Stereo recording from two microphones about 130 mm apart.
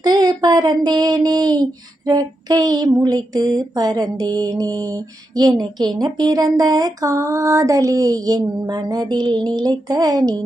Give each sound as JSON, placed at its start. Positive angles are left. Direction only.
{"t": 0.0, "sound": "child singing", "side_deg": -30}
{"t": 2.0, "sound": "female singing", "side_deg": -30}